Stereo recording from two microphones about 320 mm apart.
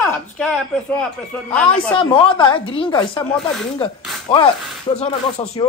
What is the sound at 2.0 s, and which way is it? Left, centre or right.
Speech, centre.